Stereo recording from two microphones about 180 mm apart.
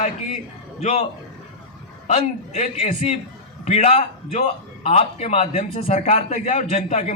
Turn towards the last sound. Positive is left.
turn(degrees=40)  # may be behind; listen again after turning